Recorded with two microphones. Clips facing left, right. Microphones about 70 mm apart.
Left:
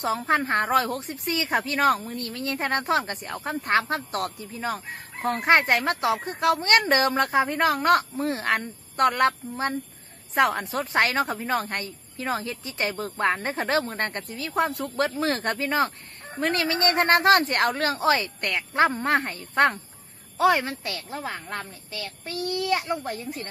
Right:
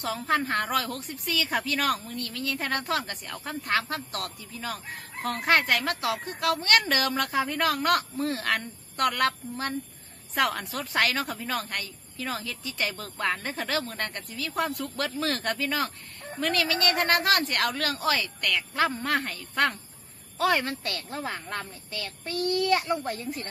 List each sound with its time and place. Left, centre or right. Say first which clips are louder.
0.0 s a woman's voice: left 3 dB; left
20.3 s a child's voice: left 4 dB; centre